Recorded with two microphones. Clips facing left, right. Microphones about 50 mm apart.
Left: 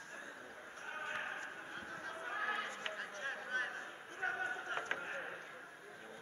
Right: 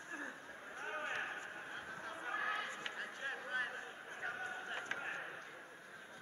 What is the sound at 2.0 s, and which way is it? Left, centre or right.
Horse, centre.